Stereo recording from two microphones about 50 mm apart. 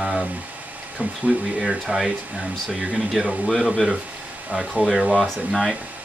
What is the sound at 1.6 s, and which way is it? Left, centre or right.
Speech, centre.